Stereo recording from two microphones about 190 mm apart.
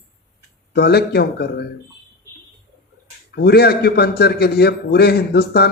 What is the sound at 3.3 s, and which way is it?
Speech, 55° left (ahead or behind).